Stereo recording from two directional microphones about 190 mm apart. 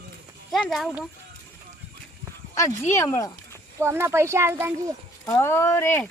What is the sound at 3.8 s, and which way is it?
Speech, 15° right (ahead or behind).